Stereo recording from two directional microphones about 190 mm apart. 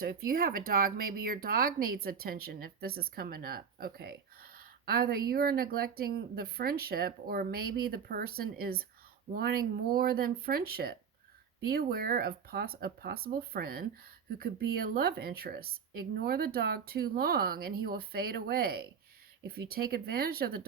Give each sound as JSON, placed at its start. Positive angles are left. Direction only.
{"t": 0.0, "sound": "speech", "side_deg": -50}